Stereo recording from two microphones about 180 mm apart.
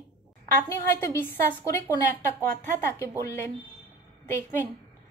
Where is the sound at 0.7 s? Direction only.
10° left (ahead or behind).